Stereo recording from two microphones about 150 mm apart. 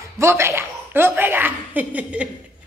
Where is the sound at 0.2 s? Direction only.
15° right (ahead or behind).